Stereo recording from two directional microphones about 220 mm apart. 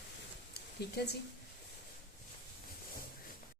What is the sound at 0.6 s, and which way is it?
Speech, 45° left (ahead or behind).